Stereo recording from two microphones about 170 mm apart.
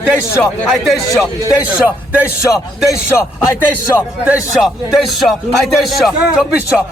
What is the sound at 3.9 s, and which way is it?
Speech, 10° right (ahead or behind).